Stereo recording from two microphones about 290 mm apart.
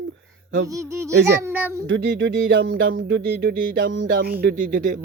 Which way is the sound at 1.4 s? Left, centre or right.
Centre.